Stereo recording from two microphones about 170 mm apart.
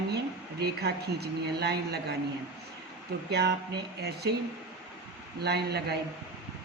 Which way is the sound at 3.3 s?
75° right (ahead or behind).